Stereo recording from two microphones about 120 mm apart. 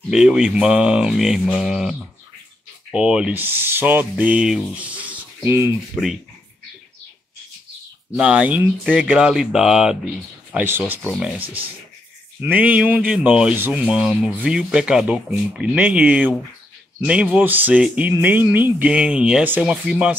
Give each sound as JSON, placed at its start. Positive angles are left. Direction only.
{"t": 0.1, "sound": "speech", "side_deg": -5}
{"t": 8.2, "sound": "speech", "side_deg": -10}
{"t": 10.5, "sound": "speech", "side_deg": -15}